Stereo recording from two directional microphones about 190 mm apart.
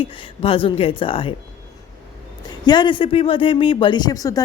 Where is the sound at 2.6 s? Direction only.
25° left (ahead or behind).